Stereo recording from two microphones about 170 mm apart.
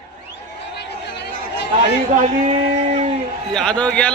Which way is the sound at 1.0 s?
75° left (ahead or behind).